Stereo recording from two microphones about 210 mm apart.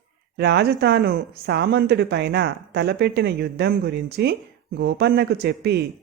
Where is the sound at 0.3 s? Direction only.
50° right (ahead or behind).